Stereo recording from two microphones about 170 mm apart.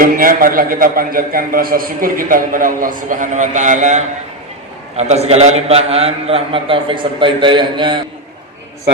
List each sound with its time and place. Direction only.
0.0 s a man's voice: 55° right (ahead or behind); by 8.0 s 30° right (ahead or behind)